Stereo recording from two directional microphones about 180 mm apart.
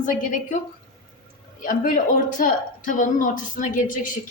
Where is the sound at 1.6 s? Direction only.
50° left (ahead or behind).